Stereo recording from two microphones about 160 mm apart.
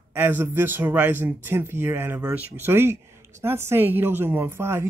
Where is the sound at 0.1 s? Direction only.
10° right (ahead or behind).